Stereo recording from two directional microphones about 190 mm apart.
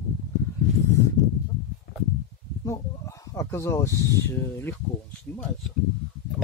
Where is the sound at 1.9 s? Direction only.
65° left (ahead or behind).